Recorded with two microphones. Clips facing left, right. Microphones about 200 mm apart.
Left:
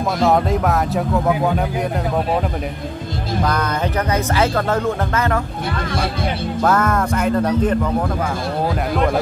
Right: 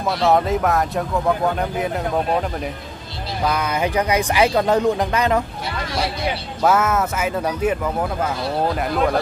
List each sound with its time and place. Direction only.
0.2 s speech: centre (ahead or behind)
4.1 s speech: 15° right (ahead or behind)
6.6 s speech: 5° right (ahead or behind)
8.9 s speech: centre (ahead or behind)